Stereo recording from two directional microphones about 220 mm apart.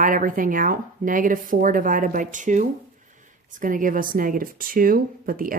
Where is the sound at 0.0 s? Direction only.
35° right (ahead or behind).